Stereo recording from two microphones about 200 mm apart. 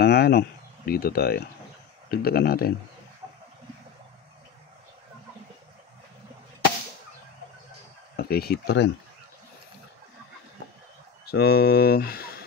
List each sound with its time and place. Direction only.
0.0 s speech: 55° left (ahead or behind)
8.2 s speech: 50° left (ahead or behind)
11.2 s speech: 55° left (ahead or behind)